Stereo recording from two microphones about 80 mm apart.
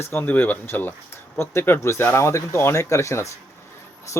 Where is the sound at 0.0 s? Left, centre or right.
Left.